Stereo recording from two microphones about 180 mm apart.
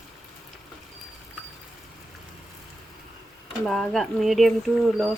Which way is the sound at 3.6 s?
5° left (ahead or behind).